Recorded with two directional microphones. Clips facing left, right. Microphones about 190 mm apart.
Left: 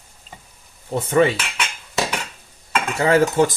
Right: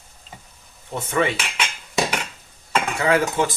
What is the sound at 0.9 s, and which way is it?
Dishes, 35° left (ahead or behind).